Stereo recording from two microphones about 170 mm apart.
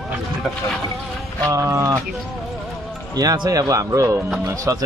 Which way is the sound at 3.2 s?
20° right (ahead or behind).